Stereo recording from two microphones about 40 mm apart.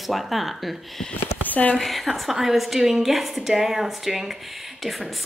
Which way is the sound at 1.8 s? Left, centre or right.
Centre.